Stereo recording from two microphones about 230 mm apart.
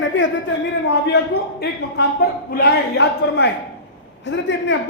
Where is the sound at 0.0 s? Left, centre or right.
Left.